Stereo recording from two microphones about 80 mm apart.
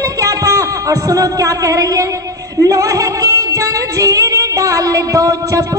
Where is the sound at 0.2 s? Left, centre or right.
Right.